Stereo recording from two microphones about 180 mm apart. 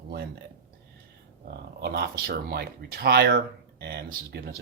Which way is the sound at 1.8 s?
65° right (ahead or behind).